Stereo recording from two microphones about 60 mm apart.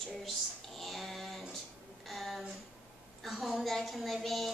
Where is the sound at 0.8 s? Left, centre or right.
Centre.